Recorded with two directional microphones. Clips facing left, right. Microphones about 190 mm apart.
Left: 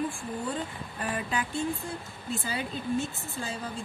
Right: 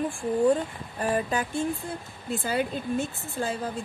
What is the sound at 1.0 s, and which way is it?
Speech, 45° right (ahead or behind).